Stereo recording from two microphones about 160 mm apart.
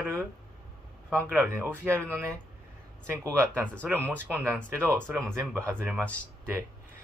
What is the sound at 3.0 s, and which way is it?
Speech, 15° right (ahead or behind).